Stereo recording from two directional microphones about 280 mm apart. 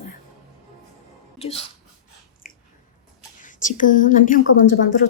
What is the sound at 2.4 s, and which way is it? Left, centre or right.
Biting, left.